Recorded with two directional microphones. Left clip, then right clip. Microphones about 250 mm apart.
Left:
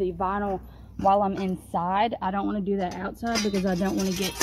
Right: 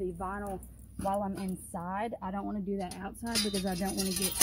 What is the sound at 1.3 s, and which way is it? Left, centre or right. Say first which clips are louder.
Speech: left 10 dB; left.